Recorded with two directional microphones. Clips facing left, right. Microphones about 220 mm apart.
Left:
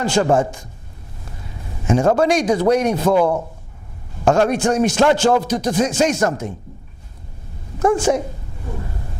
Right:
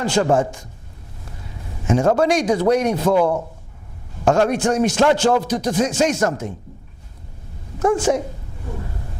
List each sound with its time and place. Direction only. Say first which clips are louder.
0.0 s a man's voice: left 1 dB; 15° left (ahead or behind)
1.9 s a man's voice: left 1 dB; 15° left (ahead or behind)
3.2 s a man's voice: left 1 dB; 30° left (ahead or behind)
4.3 s a man's voice: left 1 dB; 15° left (ahead or behind)
7.8 s a man's voice: left 1 dB; 15° left (ahead or behind)